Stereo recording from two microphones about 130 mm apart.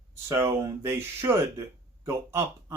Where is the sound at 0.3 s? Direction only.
20° right (ahead or behind).